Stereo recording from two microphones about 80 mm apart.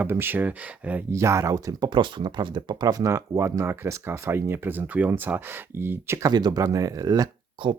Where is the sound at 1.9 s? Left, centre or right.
Right.